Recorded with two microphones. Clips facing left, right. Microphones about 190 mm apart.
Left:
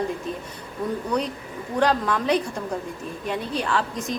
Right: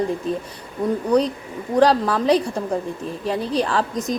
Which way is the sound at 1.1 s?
35° right (ahead or behind).